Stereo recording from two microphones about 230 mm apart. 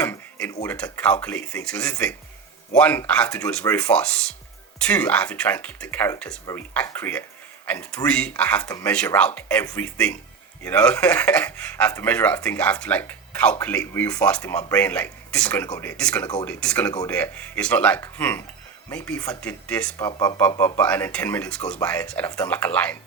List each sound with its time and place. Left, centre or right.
0.0 s a sound: centre
0.6 s speech: centre
20.1 s speech: centre